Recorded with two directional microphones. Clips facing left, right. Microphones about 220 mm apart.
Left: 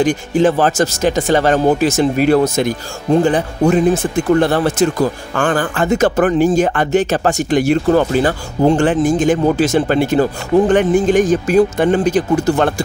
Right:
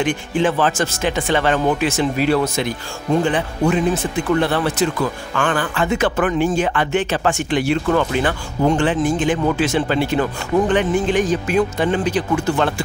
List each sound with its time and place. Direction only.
0.0 s speech: 40° left (ahead or behind)